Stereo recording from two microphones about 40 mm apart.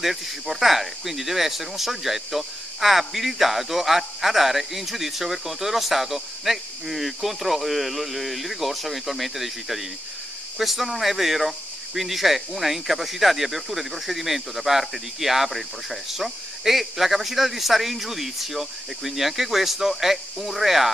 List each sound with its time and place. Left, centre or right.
0.0 s speech: centre